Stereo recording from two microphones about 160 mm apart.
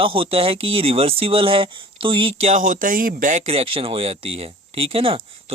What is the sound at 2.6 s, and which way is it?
Speech, 60° right (ahead or behind).